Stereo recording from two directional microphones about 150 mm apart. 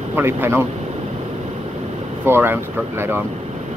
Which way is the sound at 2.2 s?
15° right (ahead or behind).